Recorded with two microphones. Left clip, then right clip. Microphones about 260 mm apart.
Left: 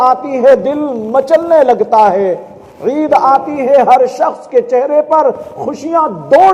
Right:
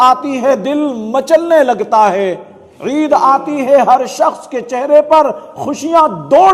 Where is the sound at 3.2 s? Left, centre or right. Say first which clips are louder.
Left 1 dB; right.